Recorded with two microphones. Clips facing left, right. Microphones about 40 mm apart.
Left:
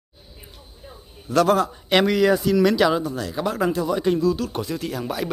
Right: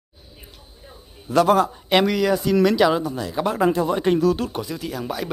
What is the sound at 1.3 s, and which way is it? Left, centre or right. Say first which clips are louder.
Speech: right 2 dB; centre.